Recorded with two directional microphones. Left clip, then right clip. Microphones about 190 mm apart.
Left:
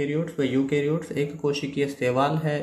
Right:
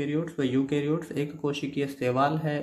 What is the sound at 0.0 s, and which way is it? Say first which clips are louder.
Speech: left 3 dB; 25° right (ahead or behind).